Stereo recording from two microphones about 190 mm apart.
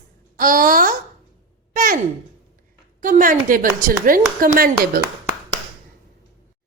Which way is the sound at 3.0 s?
45° right (ahead or behind).